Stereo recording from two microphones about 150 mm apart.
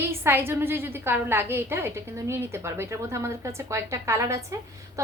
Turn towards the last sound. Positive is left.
turn(degrees=-20)  # may be behind; listen again after turning